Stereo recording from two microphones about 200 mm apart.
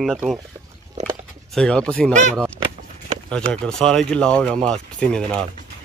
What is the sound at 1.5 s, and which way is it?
Speech, 5° left (ahead or behind).